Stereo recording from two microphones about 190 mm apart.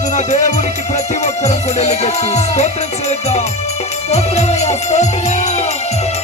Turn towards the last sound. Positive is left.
turn(degrees=35)  # may be behind; listen again after turning